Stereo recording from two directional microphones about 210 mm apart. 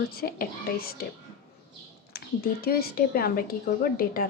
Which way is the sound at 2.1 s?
45° left (ahead or behind).